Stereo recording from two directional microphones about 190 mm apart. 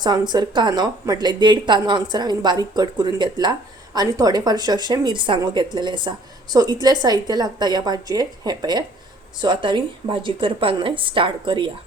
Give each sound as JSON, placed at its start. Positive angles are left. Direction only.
{"t": 0.0, "sound": "speech", "side_deg": -20}